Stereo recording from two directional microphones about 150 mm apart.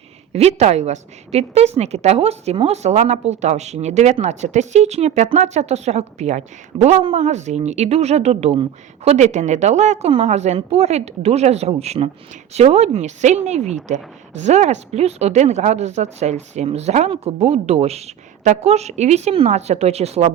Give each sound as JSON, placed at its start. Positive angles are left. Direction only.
{"t": 0.3, "sound": "a woman's voice", "side_deg": -45}